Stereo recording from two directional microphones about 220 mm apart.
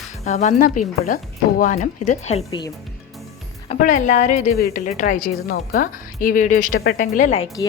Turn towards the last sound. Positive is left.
turn(degrees=35)  # may be behind; listen again after turning